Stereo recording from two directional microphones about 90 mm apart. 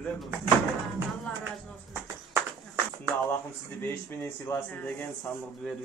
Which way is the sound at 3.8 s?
25° left (ahead or behind).